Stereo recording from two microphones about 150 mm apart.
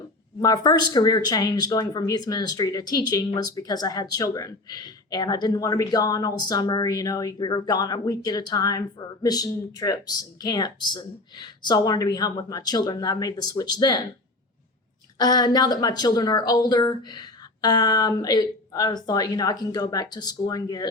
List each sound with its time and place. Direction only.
0.3 s speech: 25° left (ahead or behind)
15.2 s speech: 25° left (ahead or behind)